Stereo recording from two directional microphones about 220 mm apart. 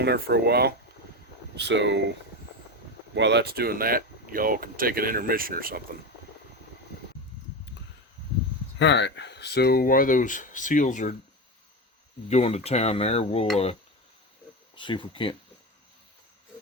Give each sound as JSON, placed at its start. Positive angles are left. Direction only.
{"t": 0.0, "sound": "speech", "side_deg": -45}
{"t": 3.2, "sound": "speech", "side_deg": -50}
{"t": 8.8, "sound": "speech", "side_deg": 55}
{"t": 12.3, "sound": "speech", "side_deg": 30}
{"t": 14.8, "sound": "speech", "side_deg": 20}